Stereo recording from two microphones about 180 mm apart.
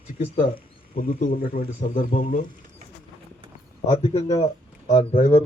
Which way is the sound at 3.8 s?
35° left (ahead or behind).